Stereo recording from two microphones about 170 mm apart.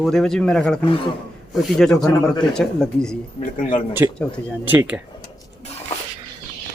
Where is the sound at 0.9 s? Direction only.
30° left (ahead or behind).